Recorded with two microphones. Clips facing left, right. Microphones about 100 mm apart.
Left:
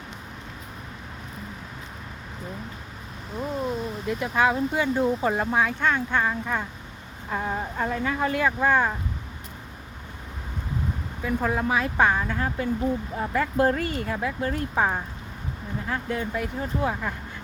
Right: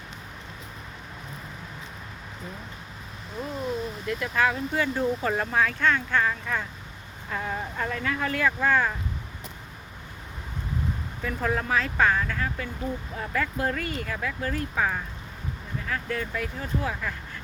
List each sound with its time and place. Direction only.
4.0 s speech: 20° left (ahead or behind)
11.2 s speech: 15° left (ahead or behind)